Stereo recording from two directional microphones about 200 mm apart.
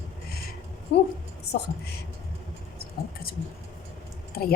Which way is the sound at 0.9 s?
55° left (ahead or behind).